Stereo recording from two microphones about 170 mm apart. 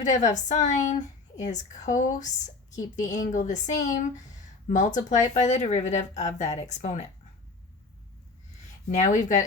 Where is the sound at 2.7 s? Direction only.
45° left (ahead or behind).